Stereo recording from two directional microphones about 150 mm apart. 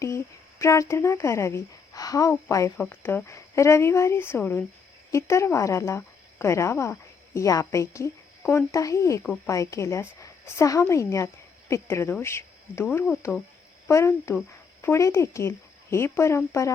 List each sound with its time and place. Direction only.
0.6 s a woman's voice: 20° left (ahead or behind)